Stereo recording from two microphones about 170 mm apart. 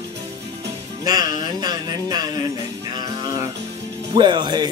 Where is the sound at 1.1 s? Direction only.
20° right (ahead or behind).